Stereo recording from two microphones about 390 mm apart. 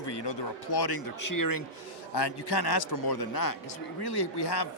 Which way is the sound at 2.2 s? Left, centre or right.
Left.